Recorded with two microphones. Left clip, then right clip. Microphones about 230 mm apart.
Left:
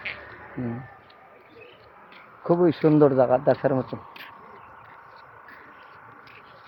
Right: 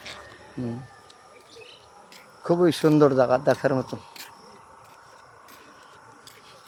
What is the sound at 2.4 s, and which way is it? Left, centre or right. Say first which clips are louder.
Speech: even; centre.